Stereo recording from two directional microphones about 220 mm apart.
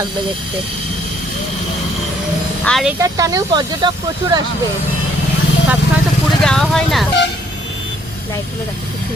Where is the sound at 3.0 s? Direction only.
15° right (ahead or behind).